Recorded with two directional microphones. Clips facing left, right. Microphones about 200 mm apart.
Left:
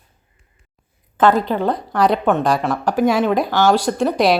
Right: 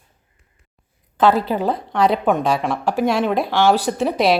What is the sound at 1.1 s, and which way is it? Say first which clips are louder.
Speech: left 1 dB; 5° right (ahead or behind).